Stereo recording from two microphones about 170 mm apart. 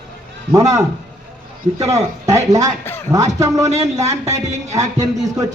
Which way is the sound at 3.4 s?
20° right (ahead or behind).